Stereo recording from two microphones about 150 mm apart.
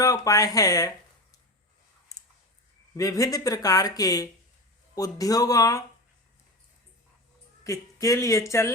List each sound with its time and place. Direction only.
0.0 s speech: 25° left (ahead or behind)
2.9 s speech: 20° left (ahead or behind)
7.6 s speech: 20° left (ahead or behind)